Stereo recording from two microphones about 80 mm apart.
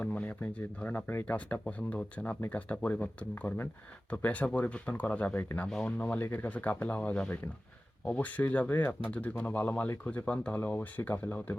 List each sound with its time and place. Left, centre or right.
0.0 s speech: centre
5.6 s speech: centre
6.0 s speech: centre